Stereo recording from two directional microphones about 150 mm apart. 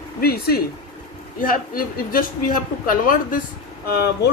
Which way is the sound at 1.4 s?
65° left (ahead or behind).